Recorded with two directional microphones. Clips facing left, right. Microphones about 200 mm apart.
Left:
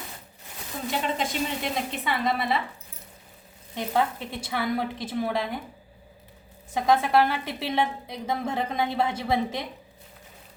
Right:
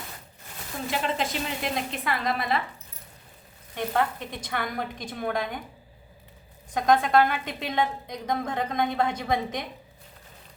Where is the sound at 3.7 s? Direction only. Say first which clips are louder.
Left 1 dB; 10° left (ahead or behind).